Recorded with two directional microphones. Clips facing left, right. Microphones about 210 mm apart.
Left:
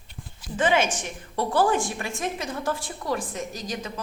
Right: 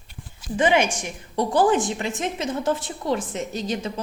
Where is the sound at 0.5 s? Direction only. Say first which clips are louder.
Right 3 dB; 15° right (ahead or behind).